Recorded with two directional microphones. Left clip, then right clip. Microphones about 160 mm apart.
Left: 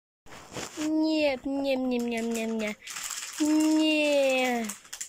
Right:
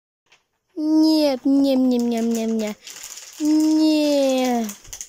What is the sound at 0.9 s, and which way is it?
Speech, 35° right (ahead or behind).